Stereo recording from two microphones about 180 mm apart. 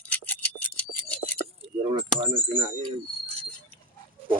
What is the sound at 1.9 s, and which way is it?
Speech, 30° right (ahead or behind).